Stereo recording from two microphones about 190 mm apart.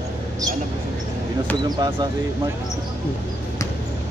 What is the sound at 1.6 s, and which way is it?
Speech, 25° right (ahead or behind).